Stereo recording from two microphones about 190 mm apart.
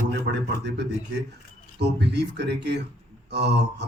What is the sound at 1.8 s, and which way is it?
Speech, 65° right (ahead or behind).